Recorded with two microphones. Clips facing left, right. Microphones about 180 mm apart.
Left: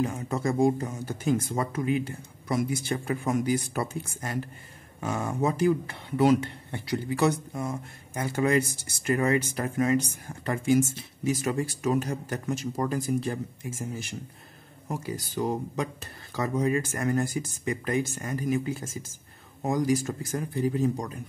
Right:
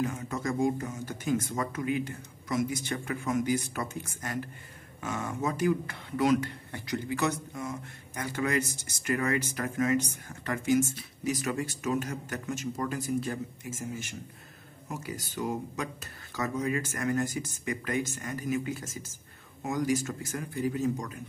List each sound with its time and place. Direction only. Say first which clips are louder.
0.0 s speech: left 4 dB; 30° left (ahead or behind)